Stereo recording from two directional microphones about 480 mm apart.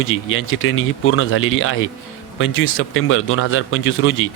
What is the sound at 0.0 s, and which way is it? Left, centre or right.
Speech, left.